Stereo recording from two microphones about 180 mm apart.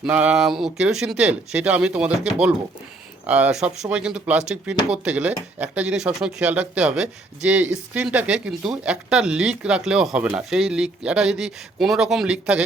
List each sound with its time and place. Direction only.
0.0 s speech: 5° right (ahead or behind)